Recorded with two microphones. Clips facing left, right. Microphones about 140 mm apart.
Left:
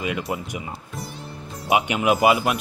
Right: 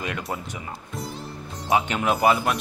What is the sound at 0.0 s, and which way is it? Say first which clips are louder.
Speech: left 4 dB; 5° left (ahead or behind).